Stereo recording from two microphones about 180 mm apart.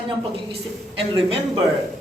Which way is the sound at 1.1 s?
30° right (ahead or behind).